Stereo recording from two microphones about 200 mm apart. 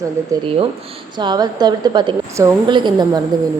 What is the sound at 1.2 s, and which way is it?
Speech, 20° right (ahead or behind).